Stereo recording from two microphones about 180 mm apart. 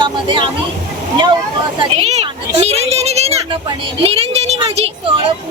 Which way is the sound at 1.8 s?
35° right (ahead or behind).